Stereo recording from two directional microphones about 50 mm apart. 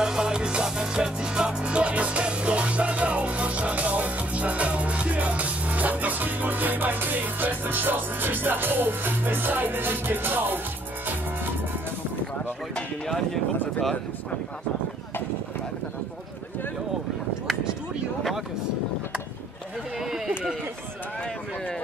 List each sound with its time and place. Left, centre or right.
0.0 s music: centre; by 10.6 s right
12.7 s speech: centre
20.0 s a sound: centre